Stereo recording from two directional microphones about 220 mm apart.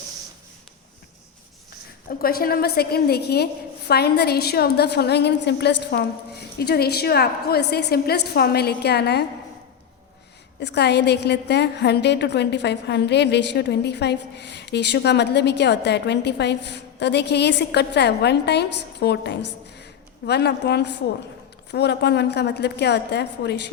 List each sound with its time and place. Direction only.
2.0 s a woman's voice: 40° left (ahead or behind)
10.6 s a woman's voice: 50° left (ahead or behind)
19.7 s a sound: 50° left (ahead or behind)
21.7 s a woman's voice: 50° left (ahead or behind)